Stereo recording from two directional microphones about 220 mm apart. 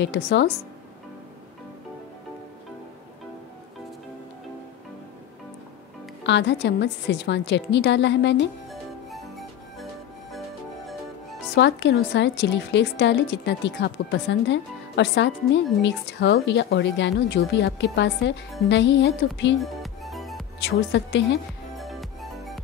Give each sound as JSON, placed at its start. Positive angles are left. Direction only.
{"t": 0.0, "sound": "a woman's voice", "side_deg": 50}
{"t": 6.2, "sound": "a woman's voice", "side_deg": 50}
{"t": 9.1, "sound": "music", "side_deg": 0}
{"t": 11.5, "sound": "a woman's voice", "side_deg": 50}
{"t": 19.6, "sound": "music", "side_deg": 0}
{"t": 20.9, "sound": "a woman's voice", "side_deg": 55}
{"t": 21.7, "sound": "music", "side_deg": 0}